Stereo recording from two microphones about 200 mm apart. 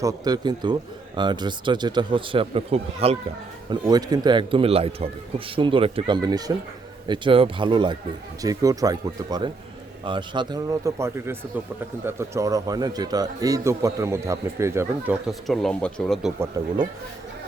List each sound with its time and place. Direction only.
0.0 s speech: 20° right (ahead or behind)
3.7 s a man's voice: 20° right (ahead or behind); by 16.3 s centre (ahead or behind)
16.6 s speech: 20° right (ahead or behind)